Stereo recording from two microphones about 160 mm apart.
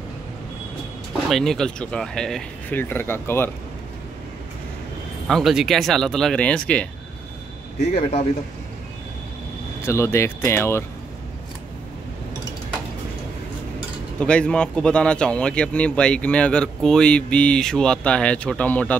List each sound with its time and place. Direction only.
1.3 s a man's voice: 5° left (ahead or behind)
5.3 s speech: centre (ahead or behind)
7.8 s a man's voice: 40° left (ahead or behind)
9.8 s a man's voice: 15° left (ahead or behind)
14.2 s a man's voice: 5° left (ahead or behind)